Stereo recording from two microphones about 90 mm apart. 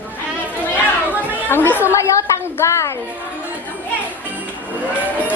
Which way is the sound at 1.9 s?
35° left (ahead or behind).